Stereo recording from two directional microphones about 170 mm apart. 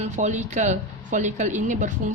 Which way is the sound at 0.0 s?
45° right (ahead or behind).